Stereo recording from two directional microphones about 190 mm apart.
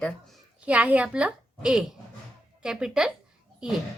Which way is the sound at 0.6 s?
5° right (ahead or behind).